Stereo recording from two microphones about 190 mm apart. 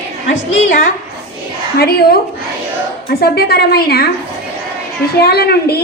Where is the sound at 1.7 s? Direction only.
55° left (ahead or behind).